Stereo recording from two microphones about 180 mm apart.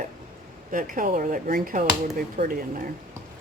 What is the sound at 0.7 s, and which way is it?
Speech, 50° right (ahead or behind).